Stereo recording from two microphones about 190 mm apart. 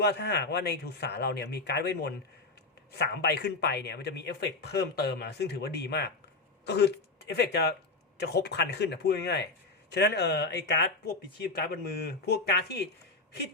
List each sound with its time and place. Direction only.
0.0 s speech: 60° left (ahead or behind)